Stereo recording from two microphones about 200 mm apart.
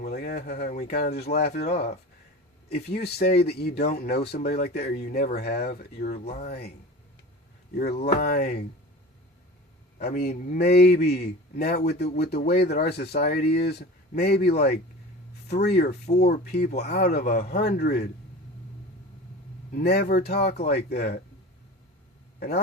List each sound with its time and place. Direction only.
0.0 s speech: 50° left (ahead or behind)
6.2 s speech: 35° left (ahead or behind)
6.5 s speech: 50° left (ahead or behind)
8.0 s speech: 50° left (ahead or behind)
10.0 s speech: 50° left (ahead or behind)
19.7 s speech: 55° left (ahead or behind)
22.4 s a man's voice: 50° left (ahead or behind)